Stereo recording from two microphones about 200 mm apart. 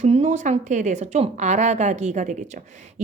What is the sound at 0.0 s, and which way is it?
A woman's voice, 35° right (ahead or behind).